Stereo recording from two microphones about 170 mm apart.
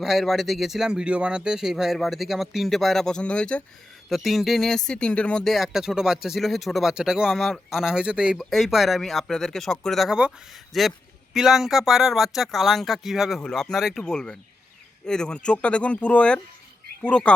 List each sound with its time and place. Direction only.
0.0 s speech: centre (ahead or behind)